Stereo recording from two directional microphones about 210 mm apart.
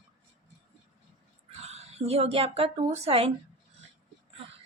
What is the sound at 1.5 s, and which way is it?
Speech, 30° right (ahead or behind).